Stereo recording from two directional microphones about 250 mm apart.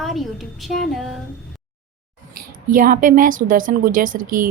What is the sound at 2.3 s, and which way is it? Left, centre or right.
Speech, right.